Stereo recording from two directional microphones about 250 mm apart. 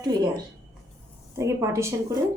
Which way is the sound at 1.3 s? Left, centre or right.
Centre.